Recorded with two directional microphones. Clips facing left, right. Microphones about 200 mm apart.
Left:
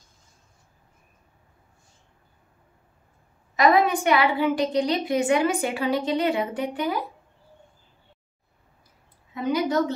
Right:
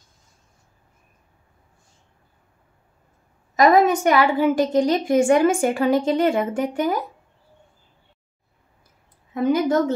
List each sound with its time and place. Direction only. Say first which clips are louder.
3.5 s a woman's voice: right 4 dB; 40° right (ahead or behind)
9.3 s a woman's voice: right 5 dB; 50° right (ahead or behind)